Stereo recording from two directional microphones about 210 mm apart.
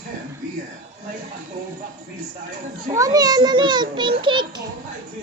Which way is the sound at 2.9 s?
15° right (ahead or behind).